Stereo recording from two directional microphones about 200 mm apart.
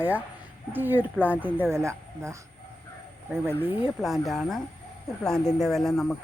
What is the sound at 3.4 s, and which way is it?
Speech, 10° right (ahead or behind).